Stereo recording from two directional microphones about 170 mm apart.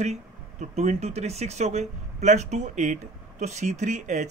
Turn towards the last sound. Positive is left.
turn(degrees=-45)  # may be behind; listen again after turning